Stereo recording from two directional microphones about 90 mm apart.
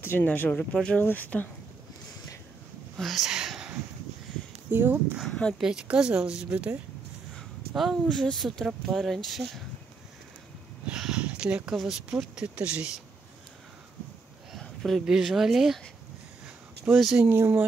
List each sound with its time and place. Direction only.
0.0 s speech: 25° left (ahead or behind)
3.0 s a sound: centre (ahead or behind)
4.6 s speech: 20° right (ahead or behind)
5.2 s speech: 10° left (ahead or behind)
5.6 s speech: 10° right (ahead or behind)
7.3 s speech: centre (ahead or behind)
10.9 s a sound: 10° right (ahead or behind)
11.7 s speech: centre (ahead or behind)
12.5 s speech: 15° right (ahead or behind)
14.8 s speech: centre (ahead or behind)
16.8 s speech: 5° right (ahead or behind)
17.3 s speech: 30° right (ahead or behind)